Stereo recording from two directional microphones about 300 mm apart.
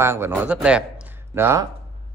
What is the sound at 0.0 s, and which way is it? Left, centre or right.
A man's voice, centre.